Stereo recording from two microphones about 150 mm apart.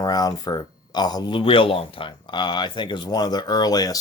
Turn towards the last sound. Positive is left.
turn(degrees=25)  # may be behind; listen again after turning